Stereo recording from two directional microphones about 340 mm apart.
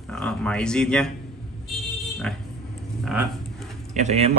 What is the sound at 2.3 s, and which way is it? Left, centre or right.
Speech, centre.